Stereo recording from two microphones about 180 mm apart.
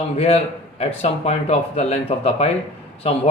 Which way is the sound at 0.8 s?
35° left (ahead or behind).